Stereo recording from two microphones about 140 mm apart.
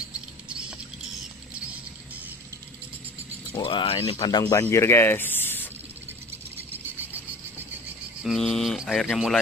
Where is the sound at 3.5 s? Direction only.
40° left (ahead or behind).